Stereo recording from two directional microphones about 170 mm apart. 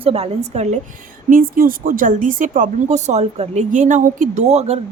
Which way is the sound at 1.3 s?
55° right (ahead or behind).